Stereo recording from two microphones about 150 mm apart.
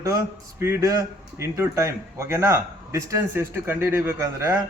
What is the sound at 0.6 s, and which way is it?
A man's voice, 20° right (ahead or behind).